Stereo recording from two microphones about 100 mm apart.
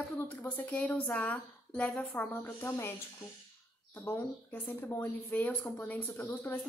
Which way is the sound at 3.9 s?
20° left (ahead or behind).